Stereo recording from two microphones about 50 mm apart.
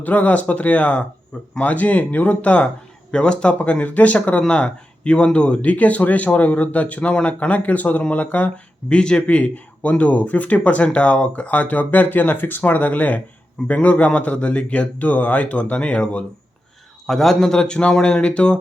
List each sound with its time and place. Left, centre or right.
0.0 s speech: left
3.6 s speech: left
17.1 s speech: centre